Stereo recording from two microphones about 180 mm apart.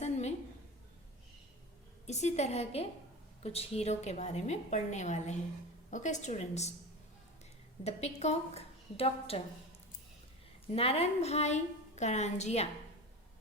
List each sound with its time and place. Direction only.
0.0 s a sound: 40° left (ahead or behind)
2.0 s a woman's voice: 40° left (ahead or behind)
7.9 s a woman's voice: 35° left (ahead or behind)
10.7 s a woman's voice: 35° left (ahead or behind)